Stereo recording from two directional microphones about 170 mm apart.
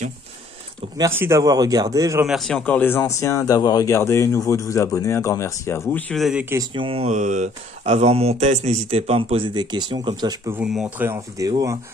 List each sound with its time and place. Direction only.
0.9 s a man's voice: 15° right (ahead or behind)
2.2 s speech: centre (ahead or behind)
6.7 s speech: 30° right (ahead or behind)
10.5 s speech: 5° right (ahead or behind)
11.1 s a man's voice: 20° right (ahead or behind)